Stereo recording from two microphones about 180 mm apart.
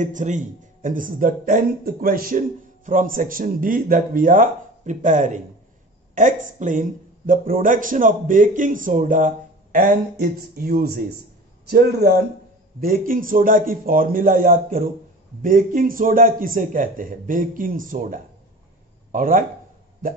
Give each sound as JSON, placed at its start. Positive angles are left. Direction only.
{"t": 0.0, "sound": "a man's voice", "side_deg": -45}